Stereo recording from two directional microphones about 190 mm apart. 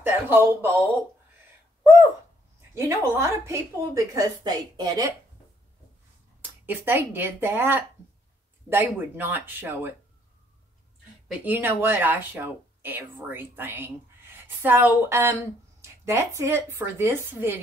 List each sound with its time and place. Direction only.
0.3 s speech: 10° right (ahead or behind)
1.8 s a sound: 15° right (ahead or behind)
2.7 s speech: 15° right (ahead or behind)
6.6 s speech: 10° right (ahead or behind)
11.2 s speech: 10° right (ahead or behind)